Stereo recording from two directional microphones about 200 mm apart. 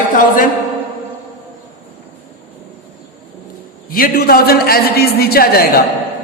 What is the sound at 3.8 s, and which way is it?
A man's voice, 45° left (ahead or behind).